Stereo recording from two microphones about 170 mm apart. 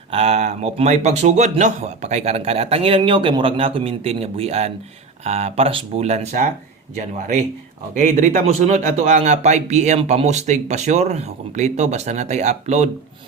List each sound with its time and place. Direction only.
0.1 s a man's voice: 35° right (ahead or behind)
8.1 s a man's voice: 45° right (ahead or behind)